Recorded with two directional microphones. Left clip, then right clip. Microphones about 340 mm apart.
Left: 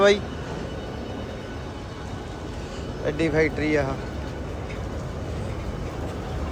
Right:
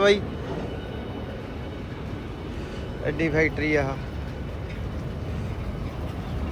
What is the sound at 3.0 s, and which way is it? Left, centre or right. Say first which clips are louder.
Speech: left 1 dB; centre.